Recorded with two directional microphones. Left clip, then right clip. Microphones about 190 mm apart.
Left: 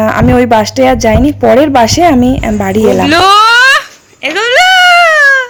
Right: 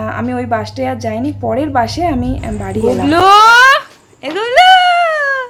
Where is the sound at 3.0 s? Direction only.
5° right (ahead or behind).